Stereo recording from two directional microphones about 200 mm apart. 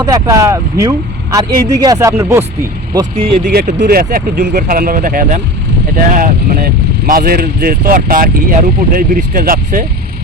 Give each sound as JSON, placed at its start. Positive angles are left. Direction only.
{"t": 0.0, "sound": "speech", "side_deg": -15}
{"t": 3.3, "sound": "speech", "side_deg": -40}